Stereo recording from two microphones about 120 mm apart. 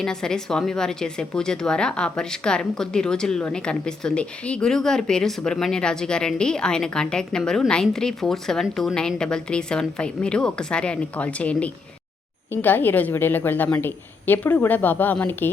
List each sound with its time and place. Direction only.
0.0 s a woman's voice: 5° left (ahead or behind)